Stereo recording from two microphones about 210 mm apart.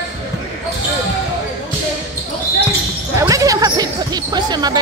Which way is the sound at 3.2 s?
15° right (ahead or behind).